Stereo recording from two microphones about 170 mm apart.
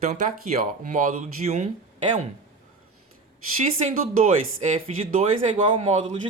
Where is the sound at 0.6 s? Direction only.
50° right (ahead or behind).